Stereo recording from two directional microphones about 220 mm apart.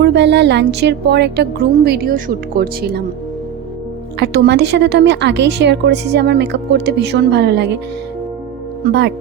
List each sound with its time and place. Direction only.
0.0 s a woman's voice: 50° right (ahead or behind)
4.2 s a woman's voice: 50° right (ahead or behind)
8.8 s a woman's voice: 50° right (ahead or behind)